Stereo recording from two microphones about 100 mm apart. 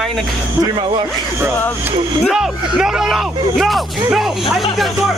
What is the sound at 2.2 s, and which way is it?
Speech, 5° right (ahead or behind).